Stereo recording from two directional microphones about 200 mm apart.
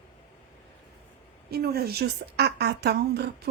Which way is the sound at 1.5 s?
50° right (ahead or behind).